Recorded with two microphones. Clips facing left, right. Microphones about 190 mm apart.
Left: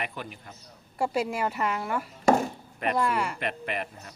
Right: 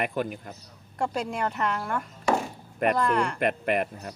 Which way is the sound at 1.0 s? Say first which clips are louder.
Left 1 dB; 5° left (ahead or behind).